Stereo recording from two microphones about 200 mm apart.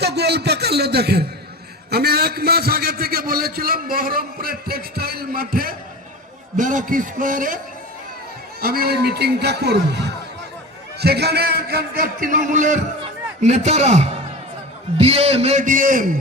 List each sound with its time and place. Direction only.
0.0 s a man's voice: 55° right (ahead or behind)
8.6 s a man's voice: 50° right (ahead or behind)
11.0 s a man's voice: 55° right (ahead or behind)